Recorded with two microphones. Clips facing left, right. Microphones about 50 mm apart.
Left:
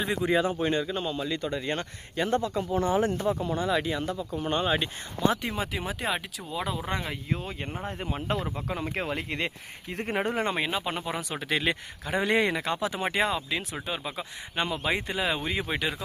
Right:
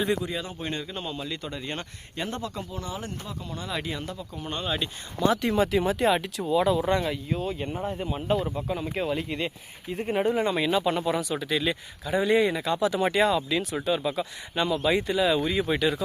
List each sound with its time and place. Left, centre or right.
0.2 s speech: left
0.6 s a man's voice: centre
2.7 s speech: left
3.5 s speech: centre
5.4 s speech: centre
7.3 s speech: left
8.0 s speech: left
10.7 s speech: centre
11.2 s speech: left
11.4 s speech: left
12.6 s speech: left